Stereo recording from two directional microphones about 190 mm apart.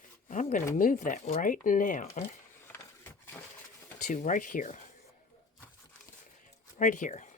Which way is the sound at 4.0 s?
40° left (ahead or behind).